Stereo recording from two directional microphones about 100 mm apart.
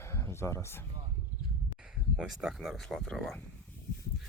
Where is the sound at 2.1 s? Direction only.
5° right (ahead or behind).